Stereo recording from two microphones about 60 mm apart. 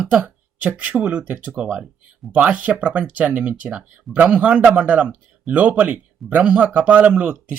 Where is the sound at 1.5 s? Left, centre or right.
Centre.